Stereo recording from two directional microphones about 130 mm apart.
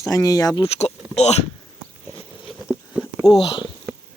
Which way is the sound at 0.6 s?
50° left (ahead or behind).